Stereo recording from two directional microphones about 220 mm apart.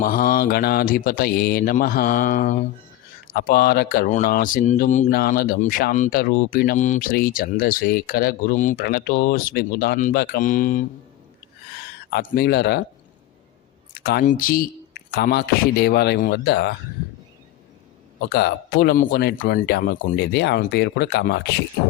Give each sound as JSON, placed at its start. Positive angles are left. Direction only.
{"t": 0.0, "sound": "speech", "side_deg": 40}
{"t": 12.1, "sound": "speech", "side_deg": 45}
{"t": 14.0, "sound": "speech", "side_deg": 45}
{"t": 18.2, "sound": "speech", "side_deg": 50}